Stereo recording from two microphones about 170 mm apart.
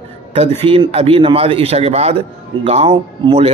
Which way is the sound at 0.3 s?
35° right (ahead or behind).